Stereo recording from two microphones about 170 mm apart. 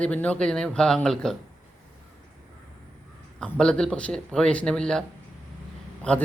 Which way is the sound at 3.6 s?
5° left (ahead or behind).